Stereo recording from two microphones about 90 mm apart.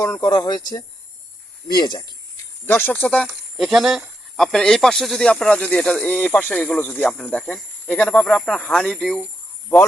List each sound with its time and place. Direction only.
0.0 s speech: 35° left (ahead or behind)
0.3 s speech: 50° left (ahead or behind)
2.6 s speech: 25° left (ahead or behind)
3.2 s speech: 5° right (ahead or behind)